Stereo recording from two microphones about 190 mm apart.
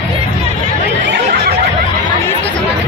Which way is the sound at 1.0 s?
65° right (ahead or behind).